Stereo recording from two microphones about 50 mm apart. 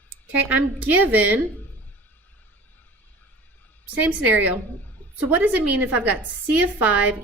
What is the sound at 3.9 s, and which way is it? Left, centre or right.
A woman's voice, right.